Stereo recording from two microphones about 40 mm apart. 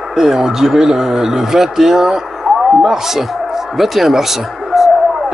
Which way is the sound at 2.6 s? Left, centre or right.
Centre.